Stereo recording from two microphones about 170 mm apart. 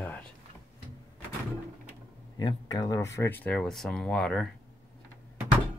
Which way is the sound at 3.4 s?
5° left (ahead or behind).